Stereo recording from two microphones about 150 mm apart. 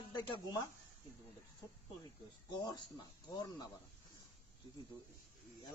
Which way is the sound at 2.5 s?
30° left (ahead or behind).